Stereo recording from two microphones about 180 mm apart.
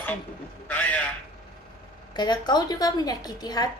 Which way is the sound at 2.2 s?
25° left (ahead or behind).